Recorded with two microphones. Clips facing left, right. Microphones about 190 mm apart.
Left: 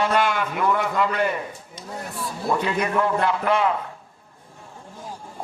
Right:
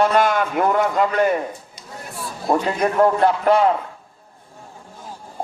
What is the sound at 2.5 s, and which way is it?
A man's voice, 45° right (ahead or behind).